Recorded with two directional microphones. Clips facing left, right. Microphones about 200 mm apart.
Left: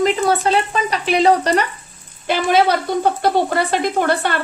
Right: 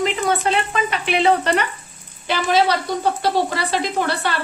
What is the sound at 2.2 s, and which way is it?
Speech, 50° left (ahead or behind).